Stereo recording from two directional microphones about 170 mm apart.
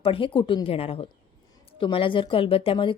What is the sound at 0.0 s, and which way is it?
A woman's voice, 30° left (ahead or behind).